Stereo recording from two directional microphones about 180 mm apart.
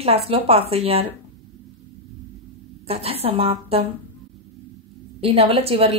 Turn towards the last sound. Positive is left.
turn(degrees=-35)  # may be behind; listen again after turning